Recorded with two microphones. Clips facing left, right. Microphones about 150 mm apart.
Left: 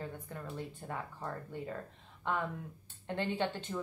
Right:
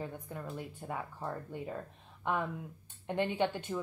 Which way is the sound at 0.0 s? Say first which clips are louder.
Right 2 dB; 10° right (ahead or behind).